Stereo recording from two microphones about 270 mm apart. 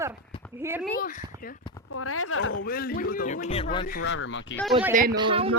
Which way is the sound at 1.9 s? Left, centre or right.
Left.